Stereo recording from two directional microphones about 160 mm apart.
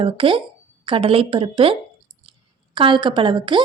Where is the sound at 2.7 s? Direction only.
30° right (ahead or behind).